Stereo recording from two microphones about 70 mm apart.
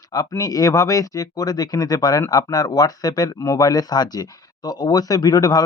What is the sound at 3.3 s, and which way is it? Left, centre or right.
Speech, left.